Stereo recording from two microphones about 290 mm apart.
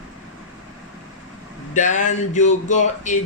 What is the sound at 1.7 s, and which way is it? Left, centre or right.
Speech, left.